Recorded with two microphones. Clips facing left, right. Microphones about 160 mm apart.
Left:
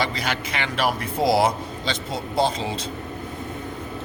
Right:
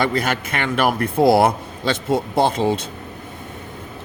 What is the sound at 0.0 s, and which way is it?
A man's voice, 55° right (ahead or behind).